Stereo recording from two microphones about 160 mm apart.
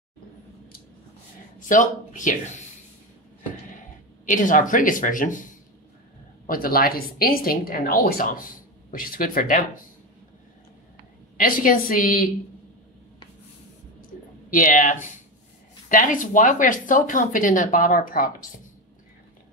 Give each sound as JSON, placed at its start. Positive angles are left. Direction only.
{"t": 1.6, "sound": "speech", "side_deg": 55}
{"t": 4.3, "sound": "speech", "side_deg": 55}
{"t": 11.3, "sound": "speech", "side_deg": 60}
{"t": 14.5, "sound": "speech", "side_deg": 55}